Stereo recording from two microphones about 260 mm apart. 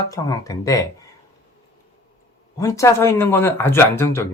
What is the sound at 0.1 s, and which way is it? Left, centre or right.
Speech, centre.